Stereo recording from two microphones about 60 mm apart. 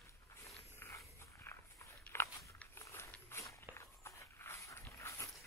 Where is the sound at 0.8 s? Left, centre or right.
Left.